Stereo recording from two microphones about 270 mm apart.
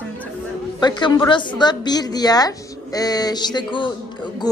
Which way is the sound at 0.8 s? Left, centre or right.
Centre.